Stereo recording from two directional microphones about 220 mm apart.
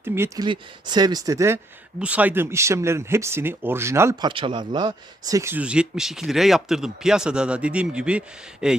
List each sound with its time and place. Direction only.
0.0 s speech: 10° right (ahead or behind)
0.4 s speech: 20° right (ahead or behind); by 8.8 s 5° right (ahead or behind)